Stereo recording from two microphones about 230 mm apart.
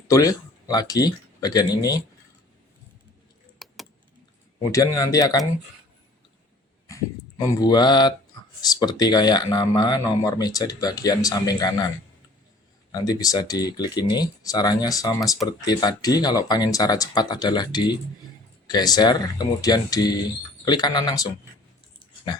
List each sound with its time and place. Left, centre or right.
0.1 s speech: centre
3.6 s keys jangling: centre
4.7 s speech: centre
6.8 s speech: centre
12.9 s speech: centre